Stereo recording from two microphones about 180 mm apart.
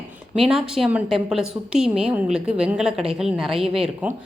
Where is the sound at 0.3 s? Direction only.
5° right (ahead or behind).